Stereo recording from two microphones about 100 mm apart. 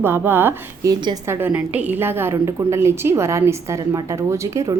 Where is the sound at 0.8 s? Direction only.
35° right (ahead or behind).